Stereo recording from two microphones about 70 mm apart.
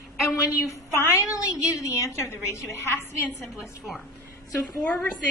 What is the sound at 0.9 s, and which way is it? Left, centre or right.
Speech, left.